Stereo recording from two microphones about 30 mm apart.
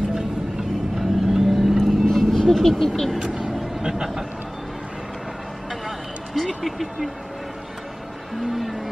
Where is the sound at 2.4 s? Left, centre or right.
Centre.